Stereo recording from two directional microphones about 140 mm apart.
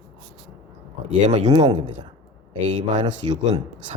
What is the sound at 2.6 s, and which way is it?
Speech, 55° right (ahead or behind).